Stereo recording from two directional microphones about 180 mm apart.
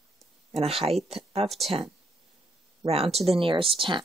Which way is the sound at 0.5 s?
35° right (ahead or behind).